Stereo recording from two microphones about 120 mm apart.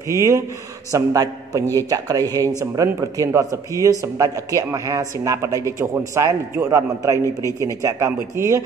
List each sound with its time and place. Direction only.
0.1 s speech: 25° right (ahead or behind)